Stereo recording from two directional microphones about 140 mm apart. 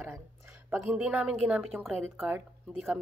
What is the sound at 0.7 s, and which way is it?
Speech, 5° right (ahead or behind).